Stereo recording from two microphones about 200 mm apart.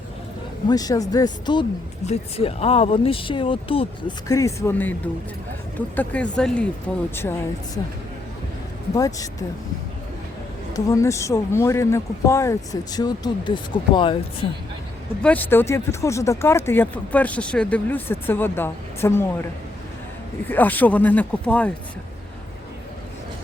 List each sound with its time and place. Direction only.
0.7 s speech: 20° left (ahead or behind)
6.0 s speech: 5° left (ahead or behind)
9.0 s speech: 15° left (ahead or behind)
10.8 s speech: 15° left (ahead or behind)
15.2 s speech: 10° left (ahead or behind)
20.5 s speech: 10° left (ahead or behind)